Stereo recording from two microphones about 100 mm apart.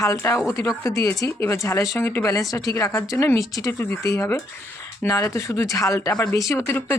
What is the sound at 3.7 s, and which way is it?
Speech, 20° left (ahead or behind).